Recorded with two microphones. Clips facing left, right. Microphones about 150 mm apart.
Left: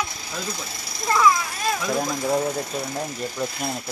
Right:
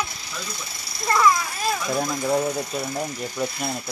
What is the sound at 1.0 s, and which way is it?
Mechanisms, centre (ahead or behind).